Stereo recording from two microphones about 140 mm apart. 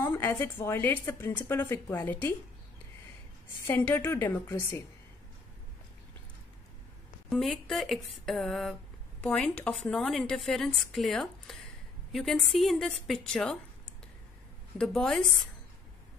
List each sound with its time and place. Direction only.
0.0 s a woman's voice: 15° left (ahead or behind)
3.6 s a woman's voice: 15° left (ahead or behind)
7.2 s a woman's voice: 5° left (ahead or behind)
14.8 s a woman's voice: 5° left (ahead or behind)